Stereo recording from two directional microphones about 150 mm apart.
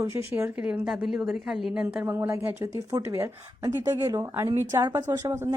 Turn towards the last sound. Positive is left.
turn(degrees=-20)  # may be behind; listen again after turning